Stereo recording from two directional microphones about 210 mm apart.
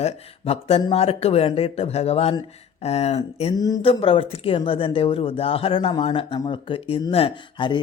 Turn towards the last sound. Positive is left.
turn(degrees=20)  # may be behind; listen again after turning